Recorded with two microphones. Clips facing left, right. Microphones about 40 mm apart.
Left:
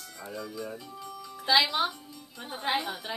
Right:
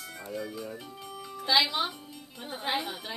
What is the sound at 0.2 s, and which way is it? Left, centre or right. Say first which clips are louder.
Speech: even; centre.